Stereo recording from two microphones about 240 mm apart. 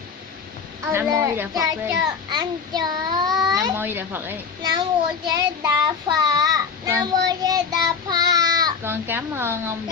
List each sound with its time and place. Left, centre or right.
0.9 s a child's voice: centre
3.3 s speech: centre
3.5 s a child's voice: centre